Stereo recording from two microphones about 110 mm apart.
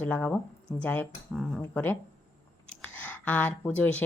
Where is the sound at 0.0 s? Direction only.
15° left (ahead or behind).